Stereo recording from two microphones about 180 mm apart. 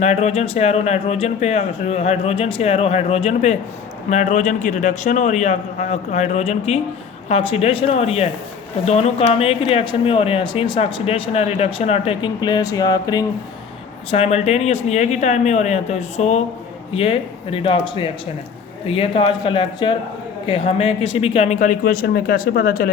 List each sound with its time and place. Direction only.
0.0 s speech: 40° left (ahead or behind); by 13.2 s 20° left (ahead or behind)
14.1 s speech: 35° left (ahead or behind); by 22.9 s 50° left (ahead or behind)